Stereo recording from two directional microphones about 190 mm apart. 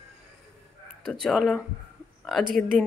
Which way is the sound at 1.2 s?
Centre (ahead or behind).